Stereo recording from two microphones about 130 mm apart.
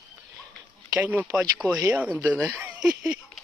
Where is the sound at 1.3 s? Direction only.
Centre (ahead or behind).